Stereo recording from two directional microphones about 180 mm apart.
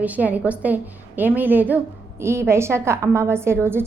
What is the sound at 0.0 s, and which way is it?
A woman's voice, 10° right (ahead or behind).